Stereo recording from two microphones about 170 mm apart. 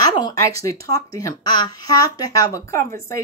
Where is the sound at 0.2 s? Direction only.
20° left (ahead or behind).